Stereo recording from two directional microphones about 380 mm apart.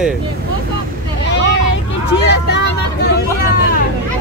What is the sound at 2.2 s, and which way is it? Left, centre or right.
Vehicle, left.